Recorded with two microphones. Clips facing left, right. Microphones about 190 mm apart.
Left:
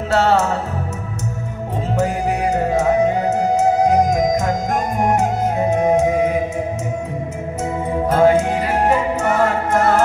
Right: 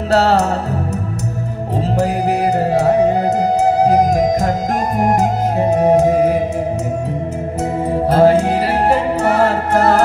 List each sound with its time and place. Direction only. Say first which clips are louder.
0.1 s music: right 2 dB; 35° right (ahead or behind)
2.0 s music: right 2 dB; 35° right (ahead or behind)
7.9 s music: right 2 dB; 35° right (ahead or behind)